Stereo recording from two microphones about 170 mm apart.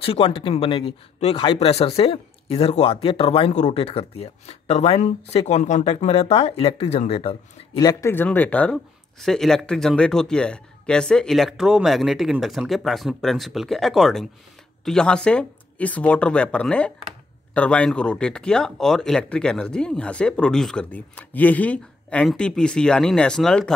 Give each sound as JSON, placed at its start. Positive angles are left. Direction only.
{"t": 0.0, "sound": "speech", "side_deg": 30}
{"t": 7.8, "sound": "speech", "side_deg": 20}